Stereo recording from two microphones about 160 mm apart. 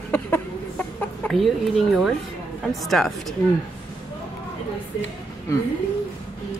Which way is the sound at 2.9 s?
5° left (ahead or behind).